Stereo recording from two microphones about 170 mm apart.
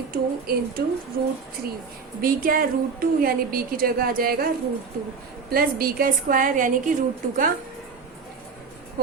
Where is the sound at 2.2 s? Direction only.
55° right (ahead or behind).